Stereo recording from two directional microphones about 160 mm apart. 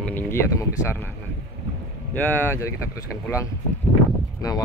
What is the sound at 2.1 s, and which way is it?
Speech, 10° left (ahead or behind).